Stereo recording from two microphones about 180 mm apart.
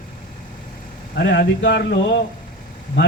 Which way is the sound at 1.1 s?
70° left (ahead or behind).